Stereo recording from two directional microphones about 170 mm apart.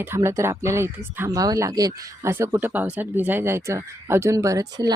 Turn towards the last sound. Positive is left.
turn(degrees=-20)  # may be behind; listen again after turning